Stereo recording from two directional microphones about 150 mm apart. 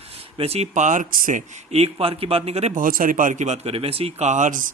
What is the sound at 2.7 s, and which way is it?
Speech, 65° right (ahead or behind).